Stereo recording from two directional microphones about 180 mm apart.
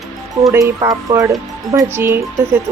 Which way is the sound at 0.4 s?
20° right (ahead or behind).